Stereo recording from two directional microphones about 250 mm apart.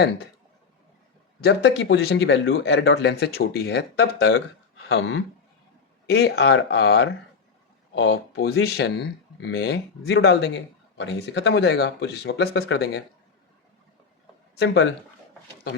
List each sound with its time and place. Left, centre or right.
1.5 s speech: left
14.5 s speech: left